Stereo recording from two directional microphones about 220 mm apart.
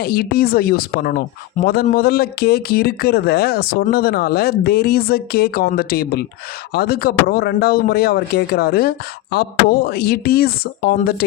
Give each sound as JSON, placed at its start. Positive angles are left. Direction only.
{"t": 0.0, "sound": "speech", "side_deg": 45}